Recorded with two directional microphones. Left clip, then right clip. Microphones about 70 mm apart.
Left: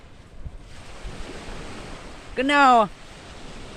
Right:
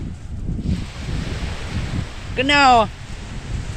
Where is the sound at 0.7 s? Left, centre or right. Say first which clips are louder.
Right 5 dB; centre.